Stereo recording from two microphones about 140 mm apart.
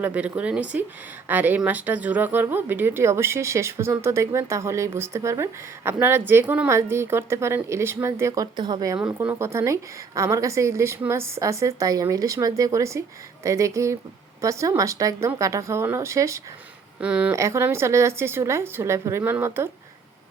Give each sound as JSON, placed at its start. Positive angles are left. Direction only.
{"t": 0.0, "sound": "a woman's voice", "side_deg": -10}
{"t": 8.5, "sound": "a woman's voice", "side_deg": -30}
{"t": 17.0, "sound": "speech", "side_deg": -10}
{"t": 17.3, "sound": "a woman's voice", "side_deg": -20}